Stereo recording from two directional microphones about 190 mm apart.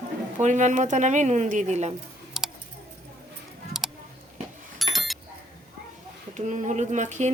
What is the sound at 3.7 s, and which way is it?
Music, centre (ahead or behind).